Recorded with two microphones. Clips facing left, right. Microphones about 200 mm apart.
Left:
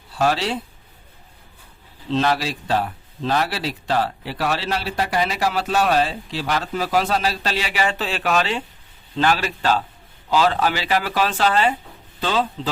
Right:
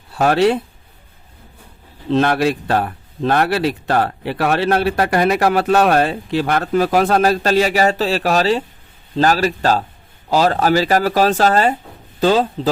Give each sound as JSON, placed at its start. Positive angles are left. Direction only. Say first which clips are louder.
{"t": 0.1, "sound": "speech", "louder": "right 7 dB", "side_deg": -55}
{"t": 2.0, "sound": "a man's voice", "louder": "right 6 dB", "side_deg": -55}